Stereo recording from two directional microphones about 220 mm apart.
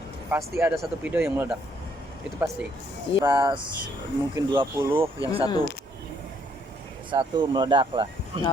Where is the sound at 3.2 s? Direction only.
20° right (ahead or behind).